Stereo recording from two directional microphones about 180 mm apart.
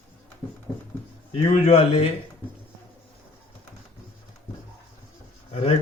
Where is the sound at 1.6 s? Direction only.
35° left (ahead or behind).